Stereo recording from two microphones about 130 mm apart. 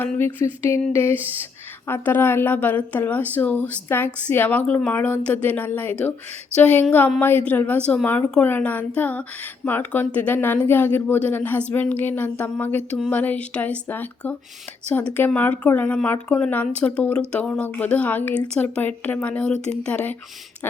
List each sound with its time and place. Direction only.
0.0 s speech: 15° left (ahead or behind)